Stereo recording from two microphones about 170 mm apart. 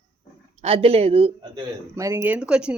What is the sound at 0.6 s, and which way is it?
Speech, 35° right (ahead or behind).